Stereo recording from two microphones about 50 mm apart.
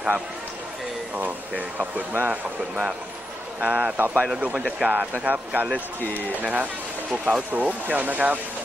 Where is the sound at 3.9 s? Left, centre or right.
Right.